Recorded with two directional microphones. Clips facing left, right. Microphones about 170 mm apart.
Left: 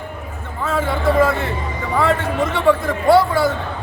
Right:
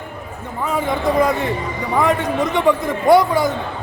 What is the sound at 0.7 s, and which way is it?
A man's voice, 15° right (ahead or behind).